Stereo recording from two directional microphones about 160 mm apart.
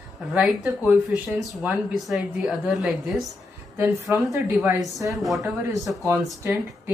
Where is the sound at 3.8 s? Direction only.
20° right (ahead or behind).